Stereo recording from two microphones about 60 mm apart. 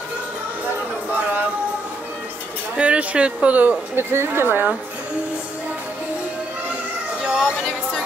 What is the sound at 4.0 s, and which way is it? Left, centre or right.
Speech, right.